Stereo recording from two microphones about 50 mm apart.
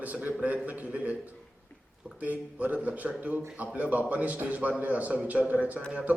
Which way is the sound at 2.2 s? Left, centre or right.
Right.